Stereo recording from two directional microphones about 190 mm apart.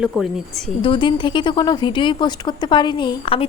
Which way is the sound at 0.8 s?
25° left (ahead or behind).